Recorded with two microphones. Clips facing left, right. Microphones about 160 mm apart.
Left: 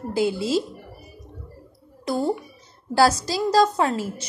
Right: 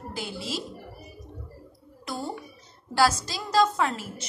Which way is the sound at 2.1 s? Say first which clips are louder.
Left 10 dB; 35° left (ahead or behind).